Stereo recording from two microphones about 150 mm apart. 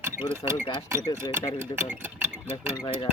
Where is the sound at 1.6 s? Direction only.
15° right (ahead or behind).